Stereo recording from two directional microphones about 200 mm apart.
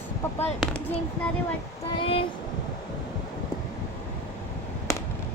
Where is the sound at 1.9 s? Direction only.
25° left (ahead or behind).